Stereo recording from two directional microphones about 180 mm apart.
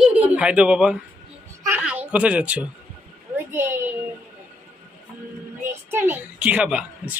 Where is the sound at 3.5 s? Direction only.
15° right (ahead or behind).